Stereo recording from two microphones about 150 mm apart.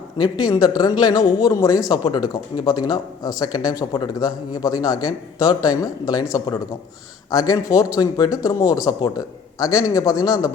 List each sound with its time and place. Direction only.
0.2 s a man's voice: 25° left (ahead or behind)